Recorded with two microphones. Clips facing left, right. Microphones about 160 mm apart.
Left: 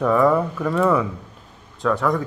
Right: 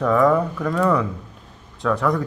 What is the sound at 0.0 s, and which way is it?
A man's voice, 5° left (ahead or behind).